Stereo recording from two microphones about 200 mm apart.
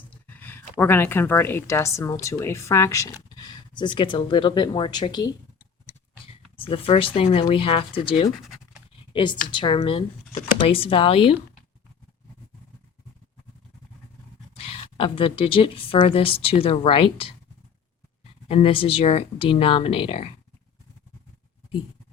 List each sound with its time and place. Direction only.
0.1 s speech: 10° left (ahead or behind); by 11.3 s 25° left (ahead or behind)
14.5 s speech: 25° left (ahead or behind)
18.4 s speech: 30° left (ahead or behind)